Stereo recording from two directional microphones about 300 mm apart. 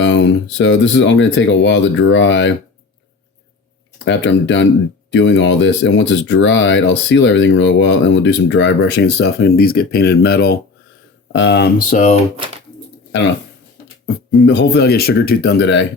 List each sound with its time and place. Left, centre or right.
0.0 s speech: left
3.9 s speech: left
14.3 s speech: left